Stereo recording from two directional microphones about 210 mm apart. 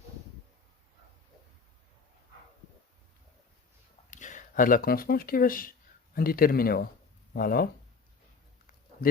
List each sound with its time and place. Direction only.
4.1 s speech: 35° left (ahead or behind)